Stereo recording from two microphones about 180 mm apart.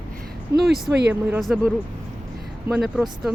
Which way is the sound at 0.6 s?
Centre (ahead or behind).